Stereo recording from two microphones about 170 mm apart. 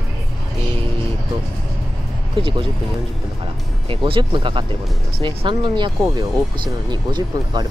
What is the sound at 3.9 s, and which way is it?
Speech, 30° right (ahead or behind).